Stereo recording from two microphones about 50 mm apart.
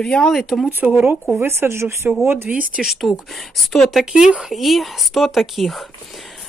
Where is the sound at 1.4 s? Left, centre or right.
Right.